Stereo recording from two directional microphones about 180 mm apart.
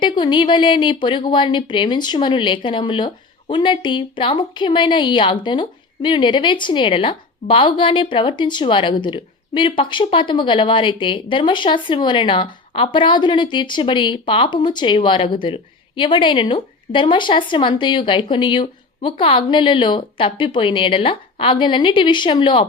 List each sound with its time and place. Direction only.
0.0 s a woman's voice: 25° left (ahead or behind)